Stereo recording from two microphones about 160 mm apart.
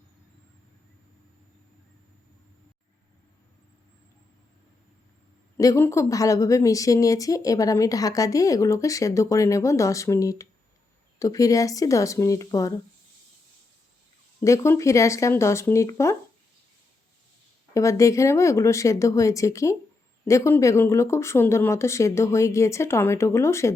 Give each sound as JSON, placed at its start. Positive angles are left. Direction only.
{"t": 5.5, "sound": "a woman's voice", "side_deg": 20}
{"t": 14.4, "sound": "speech", "side_deg": 20}
{"t": 17.7, "sound": "a woman's voice", "side_deg": 20}